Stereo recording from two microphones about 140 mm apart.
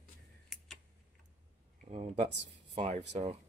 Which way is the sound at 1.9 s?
45° right (ahead or behind).